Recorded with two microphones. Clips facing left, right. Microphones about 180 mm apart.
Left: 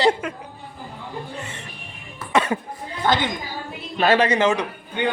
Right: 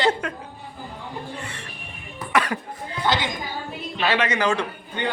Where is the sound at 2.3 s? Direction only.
25° left (ahead or behind).